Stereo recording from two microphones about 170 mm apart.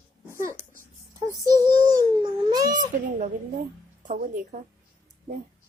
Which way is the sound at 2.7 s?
50° right (ahead or behind).